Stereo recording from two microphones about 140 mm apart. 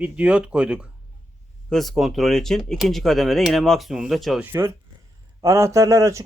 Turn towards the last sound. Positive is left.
turn(degrees=-20)  # may be behind; listen again after turning